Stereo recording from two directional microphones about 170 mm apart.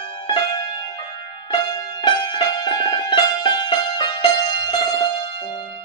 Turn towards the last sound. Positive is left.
turn(degrees=25)  # may be behind; listen again after turning